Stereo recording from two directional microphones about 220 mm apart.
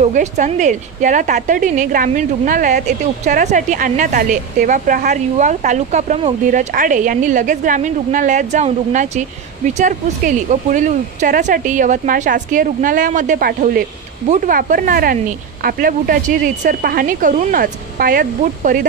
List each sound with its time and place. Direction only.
0.0 s a woman's voice: 35° right (ahead or behind)